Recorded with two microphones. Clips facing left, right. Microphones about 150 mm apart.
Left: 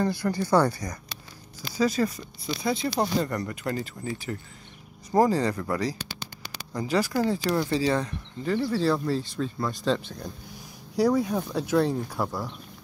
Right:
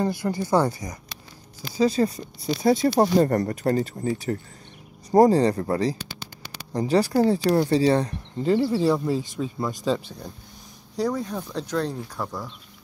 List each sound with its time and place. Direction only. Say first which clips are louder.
0.0 s speech: right 1 dB; 20° right (ahead or behind)
1.8 s speech: right 3 dB; 30° right (ahead or behind)
8.7 s speech: right 3 dB; 15° right (ahead or behind)
11.0 s speech: left 3 dB; 5° left (ahead or behind)